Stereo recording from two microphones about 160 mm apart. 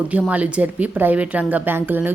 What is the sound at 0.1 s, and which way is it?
A woman's voice, 10° right (ahead or behind).